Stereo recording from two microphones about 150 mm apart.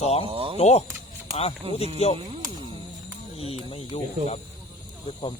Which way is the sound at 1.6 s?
40° right (ahead or behind).